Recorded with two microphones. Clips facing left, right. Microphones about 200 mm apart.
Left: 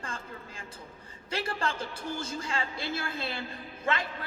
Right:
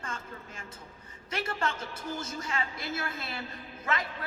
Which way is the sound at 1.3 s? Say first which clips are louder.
Even; 30° left (ahead or behind).